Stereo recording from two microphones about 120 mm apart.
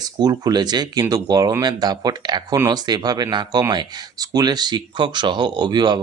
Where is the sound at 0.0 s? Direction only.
35° right (ahead or behind).